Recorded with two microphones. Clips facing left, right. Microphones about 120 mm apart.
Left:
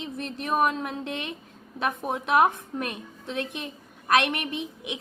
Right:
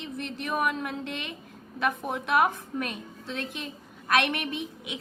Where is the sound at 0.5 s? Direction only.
25° left (ahead or behind).